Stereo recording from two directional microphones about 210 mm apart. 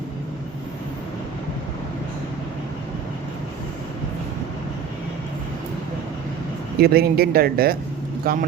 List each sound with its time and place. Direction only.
6.7 s speech: 50° right (ahead or behind)